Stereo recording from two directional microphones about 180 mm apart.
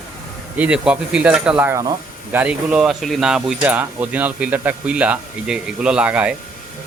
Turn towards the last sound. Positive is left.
turn(degrees=-5)  # may be behind; listen again after turning